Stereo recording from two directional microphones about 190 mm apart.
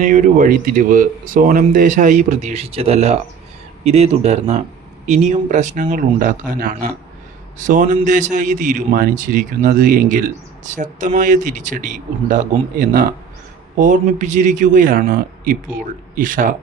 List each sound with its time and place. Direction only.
0.0 s a man's voice: 40° right (ahead or behind)